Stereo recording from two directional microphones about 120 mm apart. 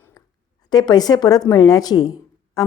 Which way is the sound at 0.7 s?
35° left (ahead or behind).